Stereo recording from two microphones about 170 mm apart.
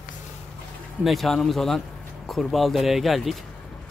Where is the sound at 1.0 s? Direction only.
Centre (ahead or behind).